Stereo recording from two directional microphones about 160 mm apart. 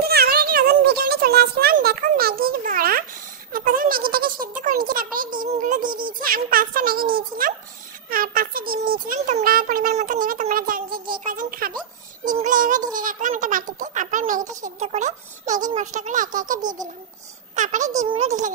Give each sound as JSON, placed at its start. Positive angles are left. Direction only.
{"t": 0.0, "sound": "a sound", "side_deg": -75}
{"t": 3.5, "sound": "a child's voice", "side_deg": -60}
{"t": 16.6, "sound": "a child's voice", "side_deg": -25}
{"t": 17.6, "sound": "speech", "side_deg": -50}